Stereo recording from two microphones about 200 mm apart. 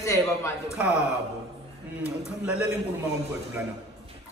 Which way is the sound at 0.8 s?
5° right (ahead or behind).